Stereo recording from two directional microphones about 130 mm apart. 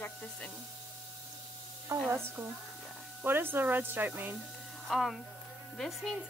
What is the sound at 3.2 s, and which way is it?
Speech, 15° right (ahead or behind).